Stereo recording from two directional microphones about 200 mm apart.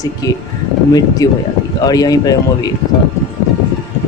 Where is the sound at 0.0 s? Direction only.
20° left (ahead or behind).